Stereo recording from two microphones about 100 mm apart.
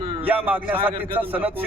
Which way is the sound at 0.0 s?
60° right (ahead or behind).